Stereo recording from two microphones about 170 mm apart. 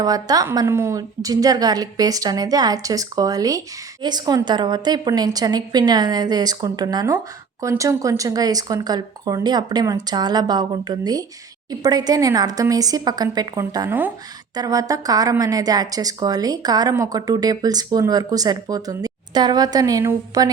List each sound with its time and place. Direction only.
0.0 s a woman's voice: 20° right (ahead or behind)